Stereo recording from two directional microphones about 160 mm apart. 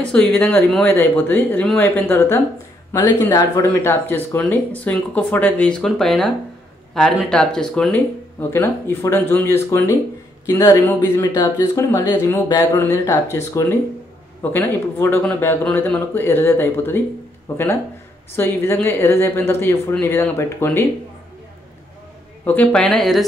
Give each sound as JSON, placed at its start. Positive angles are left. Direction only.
{"t": 0.0, "sound": "speech", "side_deg": 5}
{"t": 22.4, "sound": "speech", "side_deg": 10}